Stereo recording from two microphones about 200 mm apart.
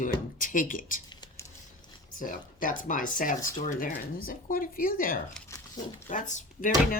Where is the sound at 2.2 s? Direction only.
40° left (ahead or behind).